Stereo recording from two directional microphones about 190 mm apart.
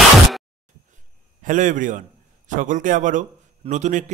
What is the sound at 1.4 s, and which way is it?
A man's voice, 45° right (ahead or behind).